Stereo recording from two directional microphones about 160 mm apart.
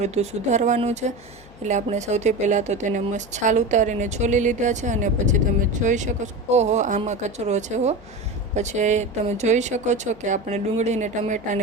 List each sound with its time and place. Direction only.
0.0 s speech: 45° right (ahead or behind)